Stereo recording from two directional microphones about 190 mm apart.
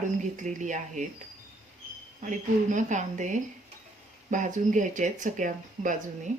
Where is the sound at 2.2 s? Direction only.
40° right (ahead or behind).